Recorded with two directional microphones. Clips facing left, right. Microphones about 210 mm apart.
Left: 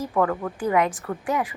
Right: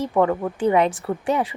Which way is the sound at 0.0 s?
25° right (ahead or behind).